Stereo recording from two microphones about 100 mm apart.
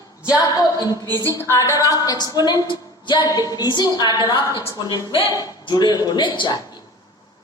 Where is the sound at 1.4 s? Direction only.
25° left (ahead or behind); by 6.6 s 50° left (ahead or behind).